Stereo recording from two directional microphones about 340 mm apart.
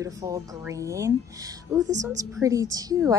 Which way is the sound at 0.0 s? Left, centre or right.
Centre.